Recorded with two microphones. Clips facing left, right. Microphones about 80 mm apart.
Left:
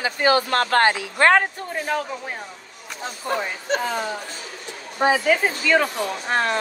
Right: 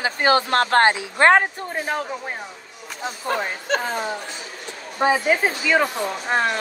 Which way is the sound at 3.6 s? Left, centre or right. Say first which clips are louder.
Left 1 dB; right.